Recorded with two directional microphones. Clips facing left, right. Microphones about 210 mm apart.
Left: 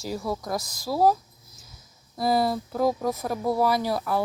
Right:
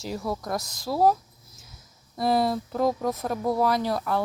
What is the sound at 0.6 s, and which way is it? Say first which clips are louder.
Speech: even; 20° right (ahead or behind).